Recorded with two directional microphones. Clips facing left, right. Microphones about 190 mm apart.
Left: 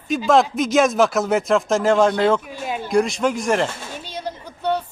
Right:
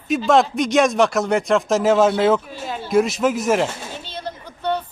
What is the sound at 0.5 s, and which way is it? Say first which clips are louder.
A man's voice: even; centre (ahead or behind).